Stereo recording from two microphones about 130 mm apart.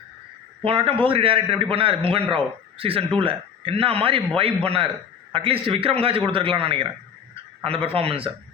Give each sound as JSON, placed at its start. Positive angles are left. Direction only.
{"t": 0.6, "sound": "a man's voice", "side_deg": -45}